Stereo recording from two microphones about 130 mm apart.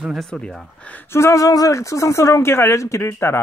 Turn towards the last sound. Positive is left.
turn(degrees=20)  # may be behind; listen again after turning